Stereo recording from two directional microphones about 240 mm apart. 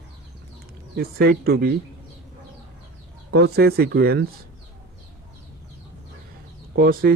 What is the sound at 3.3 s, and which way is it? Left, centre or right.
Speech, right.